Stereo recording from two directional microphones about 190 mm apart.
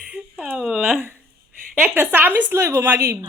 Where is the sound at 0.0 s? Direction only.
5° right (ahead or behind).